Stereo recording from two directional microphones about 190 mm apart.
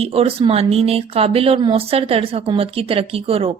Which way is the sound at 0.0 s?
30° right (ahead or behind).